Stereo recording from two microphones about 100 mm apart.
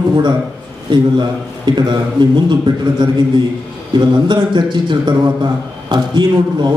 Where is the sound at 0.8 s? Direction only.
50° right (ahead or behind).